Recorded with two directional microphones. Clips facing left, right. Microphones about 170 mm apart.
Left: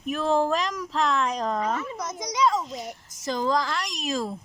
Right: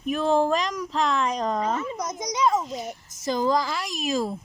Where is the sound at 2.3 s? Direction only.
15° right (ahead or behind).